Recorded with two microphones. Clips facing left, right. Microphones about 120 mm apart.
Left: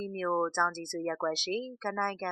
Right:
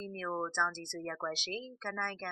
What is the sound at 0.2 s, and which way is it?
Speech, 35° left (ahead or behind).